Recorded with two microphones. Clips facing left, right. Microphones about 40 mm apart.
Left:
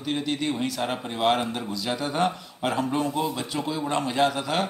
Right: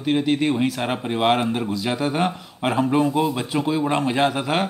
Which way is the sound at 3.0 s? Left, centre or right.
Right.